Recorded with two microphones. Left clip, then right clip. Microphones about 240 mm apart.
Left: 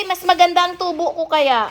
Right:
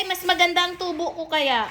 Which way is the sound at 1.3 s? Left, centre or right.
Left.